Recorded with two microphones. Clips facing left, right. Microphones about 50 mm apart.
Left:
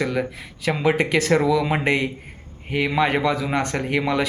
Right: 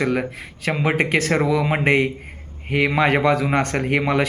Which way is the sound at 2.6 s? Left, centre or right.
Right.